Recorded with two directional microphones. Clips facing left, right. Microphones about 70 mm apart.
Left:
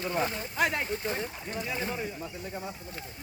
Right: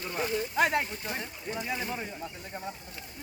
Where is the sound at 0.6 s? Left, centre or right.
Centre.